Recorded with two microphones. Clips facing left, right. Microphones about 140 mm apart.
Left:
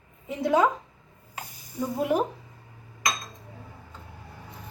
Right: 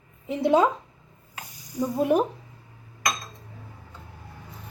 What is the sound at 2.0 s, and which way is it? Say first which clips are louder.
Speech: right 3 dB; 30° right (ahead or behind).